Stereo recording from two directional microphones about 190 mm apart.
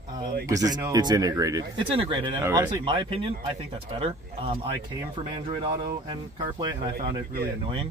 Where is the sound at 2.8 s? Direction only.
25° right (ahead or behind).